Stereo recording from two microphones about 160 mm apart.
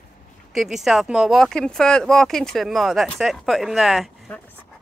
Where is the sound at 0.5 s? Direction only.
Centre (ahead or behind).